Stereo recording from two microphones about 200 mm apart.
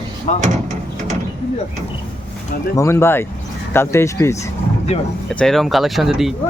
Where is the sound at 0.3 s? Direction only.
40° left (ahead or behind).